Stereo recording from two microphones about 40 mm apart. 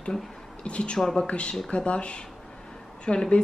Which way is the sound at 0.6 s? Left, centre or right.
Left.